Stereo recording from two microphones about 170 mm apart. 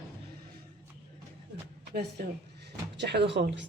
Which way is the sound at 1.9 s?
65° right (ahead or behind).